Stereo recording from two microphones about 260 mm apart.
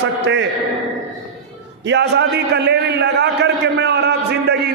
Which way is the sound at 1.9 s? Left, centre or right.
Right.